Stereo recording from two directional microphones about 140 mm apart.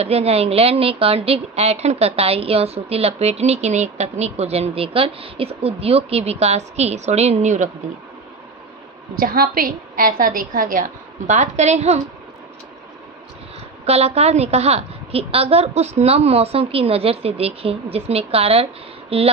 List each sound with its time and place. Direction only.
0.0 s a woman's voice: 45° right (ahead or behind)
9.2 s a woman's voice: 90° right; by 12.0 s 50° right (ahead or behind)
13.8 s a woman's voice: 50° right (ahead or behind)